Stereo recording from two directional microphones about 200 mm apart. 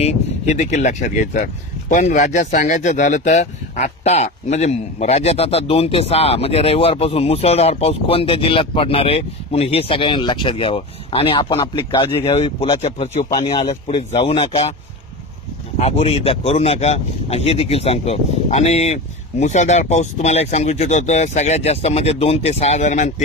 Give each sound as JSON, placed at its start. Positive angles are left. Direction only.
{"t": 0.0, "sound": "speech", "side_deg": 35}
{"t": 15.8, "sound": "speech", "side_deg": 30}